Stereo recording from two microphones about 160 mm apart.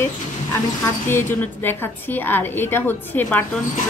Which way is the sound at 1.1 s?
15° left (ahead or behind).